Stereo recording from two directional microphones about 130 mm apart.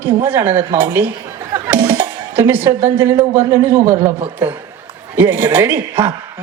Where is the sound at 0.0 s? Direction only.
20° right (ahead or behind).